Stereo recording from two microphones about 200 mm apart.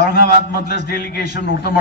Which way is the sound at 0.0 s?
50° left (ahead or behind).